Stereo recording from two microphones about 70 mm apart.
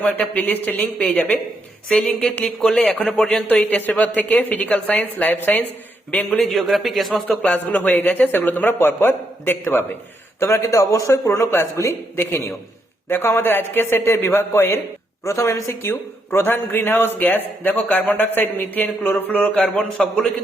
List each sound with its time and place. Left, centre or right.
0.0 s a man's voice: left
3.5 s a man's voice: left
6.4 s a man's voice: centre
7.3 s a man's voice: left
10.6 s a man's voice: left
11.3 s a man's voice: left
11.6 s a man's voice: left; by 20.3 s centre